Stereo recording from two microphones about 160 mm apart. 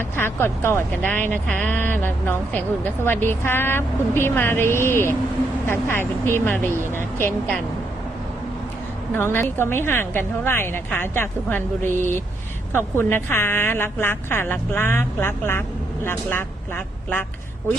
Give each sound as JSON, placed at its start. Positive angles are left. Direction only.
{"t": 0.2, "sound": "speech", "side_deg": 15}
{"t": 9.1, "sound": "speech", "side_deg": 15}